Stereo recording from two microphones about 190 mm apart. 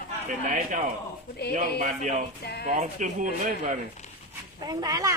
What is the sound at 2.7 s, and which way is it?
Speech, 40° right (ahead or behind).